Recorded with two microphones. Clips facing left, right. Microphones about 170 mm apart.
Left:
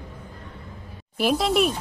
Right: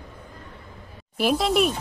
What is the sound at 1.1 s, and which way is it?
Speech, centre (ahead or behind).